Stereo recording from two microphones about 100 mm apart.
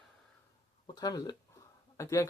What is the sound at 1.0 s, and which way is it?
Speech, 40° left (ahead or behind).